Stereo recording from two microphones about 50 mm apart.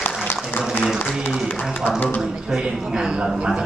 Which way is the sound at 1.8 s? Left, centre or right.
Left.